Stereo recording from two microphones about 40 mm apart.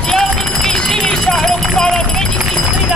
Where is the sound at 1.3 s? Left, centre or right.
Centre.